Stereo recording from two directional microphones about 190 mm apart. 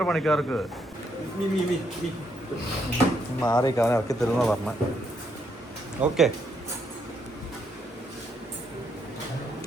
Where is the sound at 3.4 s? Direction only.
20° left (ahead or behind).